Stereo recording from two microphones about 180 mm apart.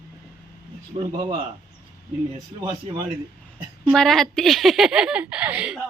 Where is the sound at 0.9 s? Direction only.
25° right (ahead or behind).